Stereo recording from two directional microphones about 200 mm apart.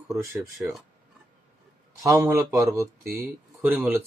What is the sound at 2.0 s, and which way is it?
Speech, 15° right (ahead or behind).